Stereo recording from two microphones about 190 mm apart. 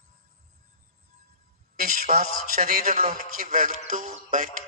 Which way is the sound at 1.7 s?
50° right (ahead or behind).